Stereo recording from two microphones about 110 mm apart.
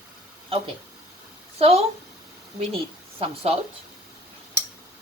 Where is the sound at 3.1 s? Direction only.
60° right (ahead or behind).